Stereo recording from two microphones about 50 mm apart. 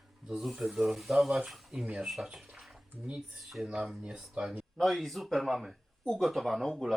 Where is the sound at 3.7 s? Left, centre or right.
Centre.